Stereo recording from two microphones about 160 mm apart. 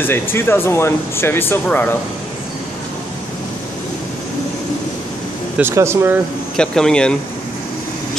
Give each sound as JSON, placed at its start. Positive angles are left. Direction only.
{"t": 0.0, "sound": "speech", "side_deg": 15}
{"t": 5.6, "sound": "speech", "side_deg": -15}
{"t": 6.5, "sound": "speech", "side_deg": 5}